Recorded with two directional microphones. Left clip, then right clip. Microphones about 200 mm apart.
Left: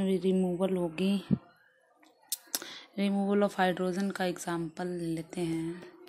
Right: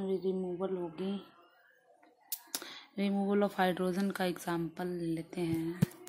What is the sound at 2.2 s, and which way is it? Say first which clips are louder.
Speech: left 5 dB; 10° left (ahead or behind).